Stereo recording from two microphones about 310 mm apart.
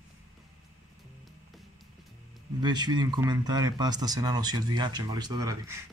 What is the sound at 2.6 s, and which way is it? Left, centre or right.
A man's voice, centre.